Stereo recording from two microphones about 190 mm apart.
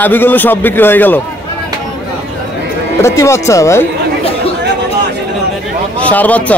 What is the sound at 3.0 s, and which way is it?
Speech, 15° left (ahead or behind).